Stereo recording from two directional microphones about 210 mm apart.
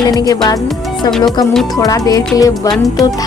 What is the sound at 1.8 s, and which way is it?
Speech, 15° left (ahead or behind).